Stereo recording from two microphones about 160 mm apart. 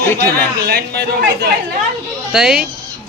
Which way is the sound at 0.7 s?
85° right.